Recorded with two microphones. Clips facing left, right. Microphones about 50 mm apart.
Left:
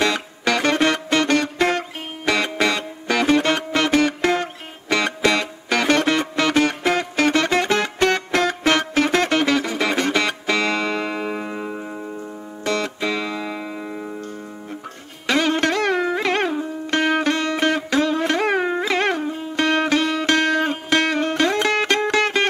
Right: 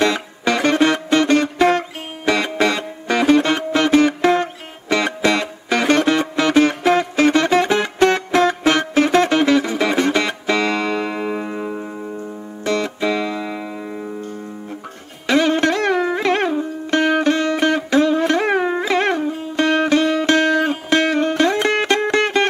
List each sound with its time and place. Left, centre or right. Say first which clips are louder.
0.0 s music: right 3 dB; centre
15.2 s music: right 3 dB; centre